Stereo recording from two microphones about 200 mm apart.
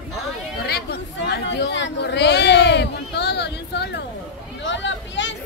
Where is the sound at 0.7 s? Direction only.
50° left (ahead or behind).